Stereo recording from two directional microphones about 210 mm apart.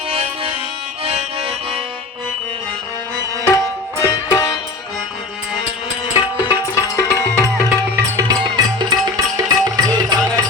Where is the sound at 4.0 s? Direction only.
15° left (ahead or behind).